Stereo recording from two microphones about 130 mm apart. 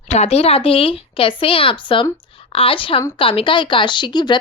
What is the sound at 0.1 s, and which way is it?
A woman's voice, 55° left (ahead or behind).